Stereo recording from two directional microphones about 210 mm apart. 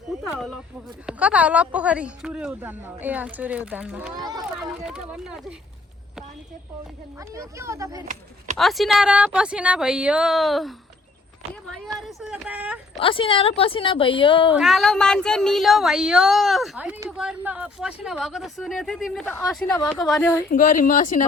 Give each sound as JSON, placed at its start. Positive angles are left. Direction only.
{"t": 0.1, "sound": "a sound", "side_deg": 0}
{"t": 1.0, "sound": "a woman's voice", "side_deg": -5}
{"t": 7.2, "sound": "a woman's voice", "side_deg": -15}
{"t": 8.5, "sound": "speech", "side_deg": 0}
{"t": 13.0, "sound": "a woman's voice", "side_deg": 25}
{"t": 14.5, "sound": "speech", "side_deg": 0}
{"t": 20.5, "sound": "speech", "side_deg": 40}